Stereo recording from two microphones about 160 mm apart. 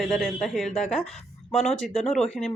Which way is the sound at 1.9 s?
40° left (ahead or behind).